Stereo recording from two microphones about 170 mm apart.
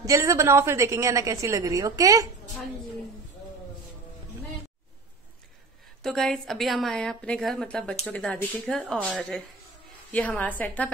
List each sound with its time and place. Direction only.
0.0 s a woman's voice: 20° right (ahead or behind)
6.0 s a woman's voice: centre (ahead or behind)